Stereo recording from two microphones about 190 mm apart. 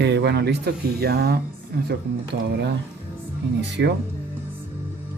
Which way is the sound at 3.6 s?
65° right (ahead or behind).